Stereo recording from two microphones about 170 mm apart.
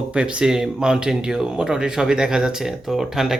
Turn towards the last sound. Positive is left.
turn(degrees=0)  # may be behind; listen again after turning